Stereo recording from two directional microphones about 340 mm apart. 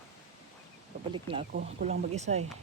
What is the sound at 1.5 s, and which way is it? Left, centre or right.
Speech, right.